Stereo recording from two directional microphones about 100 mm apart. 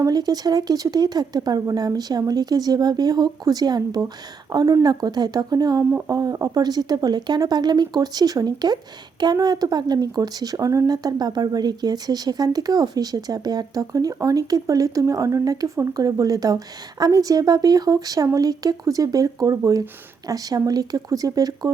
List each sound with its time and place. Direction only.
0.0 s speech: 40° right (ahead or behind)